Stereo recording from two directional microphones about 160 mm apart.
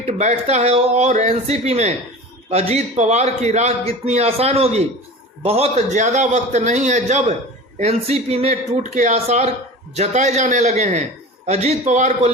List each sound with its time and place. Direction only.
0.0 s a man's voice: 45° right (ahead or behind)